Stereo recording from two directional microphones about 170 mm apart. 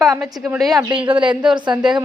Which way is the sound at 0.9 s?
30° right (ahead or behind).